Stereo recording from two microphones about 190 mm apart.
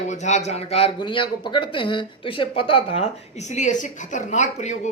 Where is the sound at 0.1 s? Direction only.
40° left (ahead or behind).